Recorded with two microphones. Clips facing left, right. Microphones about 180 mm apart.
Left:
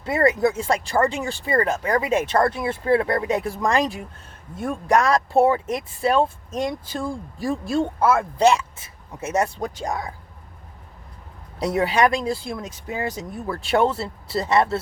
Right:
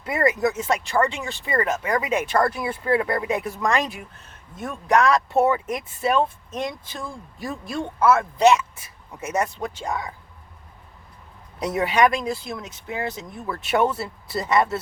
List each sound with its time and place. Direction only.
0.0 s speech: 30° left (ahead or behind)
9.6 s speech: 40° left (ahead or behind)
11.6 s speech: 30° left (ahead or behind)